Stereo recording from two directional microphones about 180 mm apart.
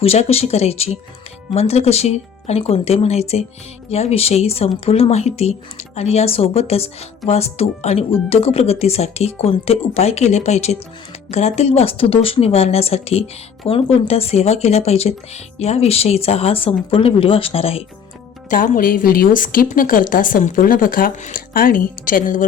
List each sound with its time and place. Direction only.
0.0 s speech: 35° left (ahead or behind)
18.5 s a woman's voice: 50° left (ahead or behind)